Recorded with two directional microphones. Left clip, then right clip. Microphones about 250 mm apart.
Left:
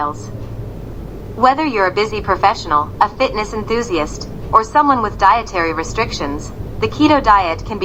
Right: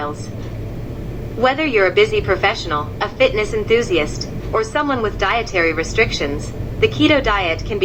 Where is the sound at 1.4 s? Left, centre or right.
Left.